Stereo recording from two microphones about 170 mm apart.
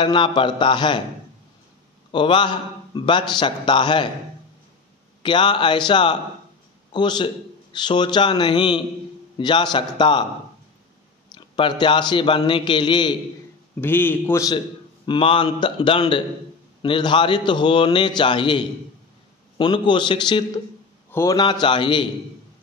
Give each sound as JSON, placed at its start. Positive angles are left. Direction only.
{"t": 0.0, "sound": "a man's voice", "side_deg": 30}
{"t": 2.1, "sound": "a man's voice", "side_deg": 30}
{"t": 5.2, "sound": "a man's voice", "side_deg": 30}
{"t": 11.3, "sound": "a man's voice", "side_deg": 30}
{"t": 13.7, "sound": "a man's voice", "side_deg": 10}
{"t": 15.0, "sound": "a man's voice", "side_deg": 30}
{"t": 19.6, "sound": "a man's voice", "side_deg": 25}
{"t": 21.1, "sound": "a man's voice", "side_deg": 15}